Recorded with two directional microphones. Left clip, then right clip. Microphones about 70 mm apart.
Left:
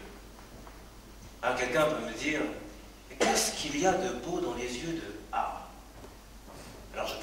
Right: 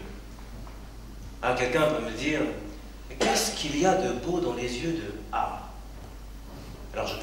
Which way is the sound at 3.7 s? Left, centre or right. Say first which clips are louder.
Right 5 dB; centre.